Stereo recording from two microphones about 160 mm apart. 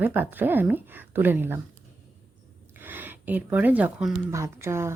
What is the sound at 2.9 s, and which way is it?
Speech, 10° right (ahead or behind).